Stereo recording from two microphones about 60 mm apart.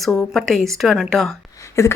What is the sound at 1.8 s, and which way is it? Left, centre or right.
Speech, left.